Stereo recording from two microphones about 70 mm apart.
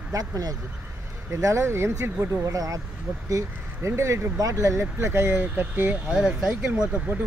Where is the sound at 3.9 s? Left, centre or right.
Right.